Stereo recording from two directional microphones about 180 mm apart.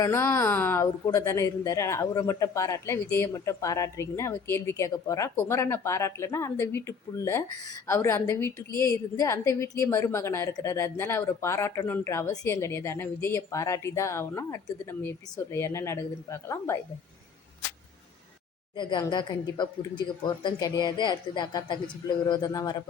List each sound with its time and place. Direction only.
0.0 s a woman's voice: 15° left (ahead or behind)
18.8 s speech: 25° left (ahead or behind)